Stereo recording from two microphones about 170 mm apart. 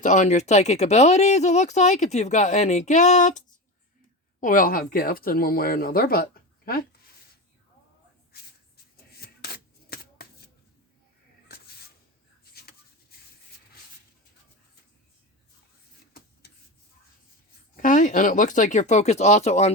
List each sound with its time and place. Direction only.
0.0 s speech: 45° left (ahead or behind); by 6.8 s 60° left (ahead or behind)
9.1 s shuffling cards: 65° left (ahead or behind)
11.4 s a sound: 65° left (ahead or behind)
17.7 s speech: 50° left (ahead or behind)